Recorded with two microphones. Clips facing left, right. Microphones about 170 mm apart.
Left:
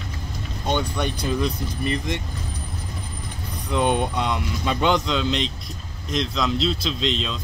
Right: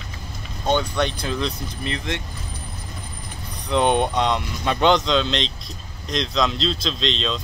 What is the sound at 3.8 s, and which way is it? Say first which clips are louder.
Speech: right 2 dB; 60° right (ahead or behind).